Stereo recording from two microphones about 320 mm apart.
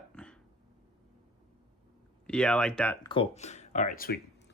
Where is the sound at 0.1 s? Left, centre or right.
Centre.